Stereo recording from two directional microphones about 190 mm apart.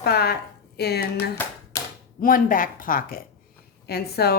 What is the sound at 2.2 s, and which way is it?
A woman's voice, 45° left (ahead or behind).